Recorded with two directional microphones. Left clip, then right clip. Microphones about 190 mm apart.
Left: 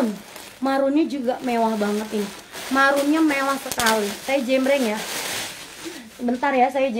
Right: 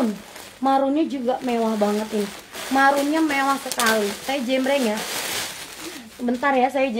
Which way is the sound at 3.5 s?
10° left (ahead or behind).